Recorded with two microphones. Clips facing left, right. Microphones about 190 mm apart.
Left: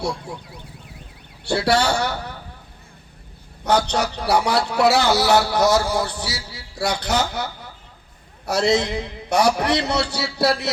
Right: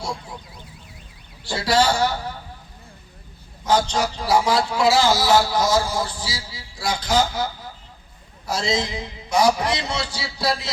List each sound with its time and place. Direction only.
1.5 s a man's voice: 60° left (ahead or behind)
3.6 s a man's voice: 65° left (ahead or behind)